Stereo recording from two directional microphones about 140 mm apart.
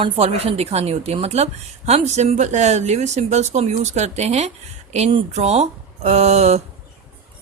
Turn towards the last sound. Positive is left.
turn(degrees=-50)  # may be behind; listen again after turning